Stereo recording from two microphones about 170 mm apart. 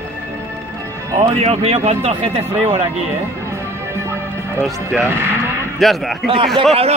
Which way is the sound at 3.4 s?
15° right (ahead or behind).